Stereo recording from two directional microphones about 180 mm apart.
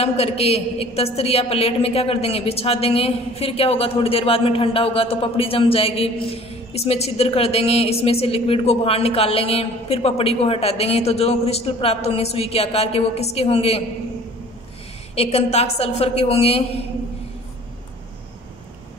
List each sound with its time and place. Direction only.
0.0 s a woman's voice: 35° left (ahead or behind)
15.1 s a woman's voice: 35° left (ahead or behind)